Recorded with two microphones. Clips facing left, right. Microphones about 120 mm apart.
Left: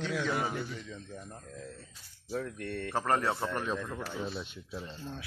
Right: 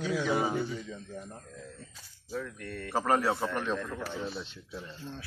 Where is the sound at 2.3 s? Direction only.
40° left (ahead or behind).